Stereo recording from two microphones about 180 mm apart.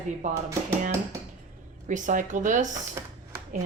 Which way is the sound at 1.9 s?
45° right (ahead or behind).